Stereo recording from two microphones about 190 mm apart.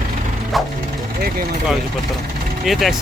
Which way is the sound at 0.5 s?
Centre (ahead or behind).